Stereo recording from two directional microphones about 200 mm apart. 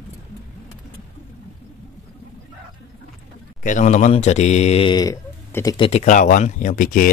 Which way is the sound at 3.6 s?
40° left (ahead or behind).